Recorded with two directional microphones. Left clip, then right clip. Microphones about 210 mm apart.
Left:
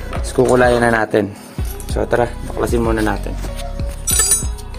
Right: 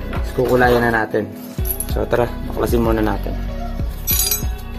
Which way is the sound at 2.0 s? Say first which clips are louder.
Left 2 dB; 5° left (ahead or behind).